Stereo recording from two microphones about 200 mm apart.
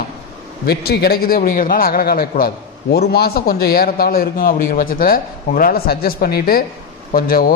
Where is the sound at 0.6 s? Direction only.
50° left (ahead or behind).